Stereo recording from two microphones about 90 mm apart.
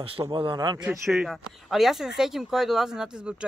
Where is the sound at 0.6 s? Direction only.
55° right (ahead or behind).